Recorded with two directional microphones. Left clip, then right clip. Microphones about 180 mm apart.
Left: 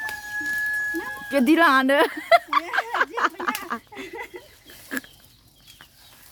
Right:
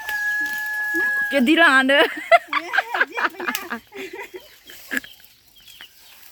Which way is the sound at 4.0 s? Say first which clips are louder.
Right 2 dB; 25° left (ahead or behind).